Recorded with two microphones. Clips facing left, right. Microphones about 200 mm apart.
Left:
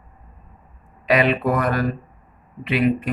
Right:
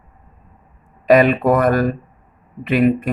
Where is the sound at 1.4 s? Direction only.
50° right (ahead or behind).